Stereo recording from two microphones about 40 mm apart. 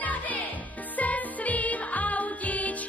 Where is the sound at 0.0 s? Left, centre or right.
Left.